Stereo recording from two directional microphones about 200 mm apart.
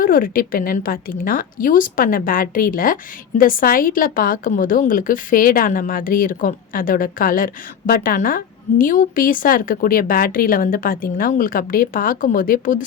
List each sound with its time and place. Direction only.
0.0 s a woman's voice: 45° left (ahead or behind)